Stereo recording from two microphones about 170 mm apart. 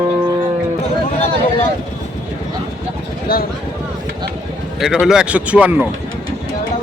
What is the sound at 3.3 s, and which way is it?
Speech, 60° left (ahead or behind).